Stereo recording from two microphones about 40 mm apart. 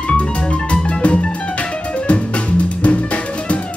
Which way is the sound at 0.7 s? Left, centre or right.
Left.